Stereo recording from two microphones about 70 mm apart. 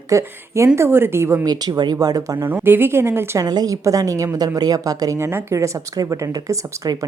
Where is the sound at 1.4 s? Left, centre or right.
Right.